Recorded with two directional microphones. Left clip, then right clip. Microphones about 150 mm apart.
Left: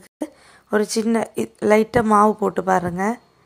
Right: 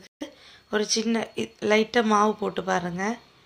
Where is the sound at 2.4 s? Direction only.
30° left (ahead or behind).